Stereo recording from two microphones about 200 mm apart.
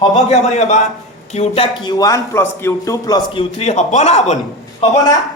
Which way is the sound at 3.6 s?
35° left (ahead or behind).